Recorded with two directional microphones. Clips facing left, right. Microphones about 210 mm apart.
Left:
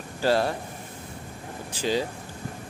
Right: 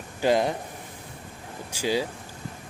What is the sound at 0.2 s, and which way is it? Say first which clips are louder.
Speech: right 1 dB; 15° right (ahead or behind).